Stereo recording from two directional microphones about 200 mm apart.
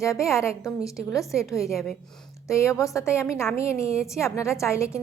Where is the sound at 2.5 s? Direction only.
15° left (ahead or behind).